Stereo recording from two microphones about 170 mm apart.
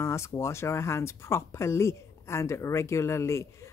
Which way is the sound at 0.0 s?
15° left (ahead or behind).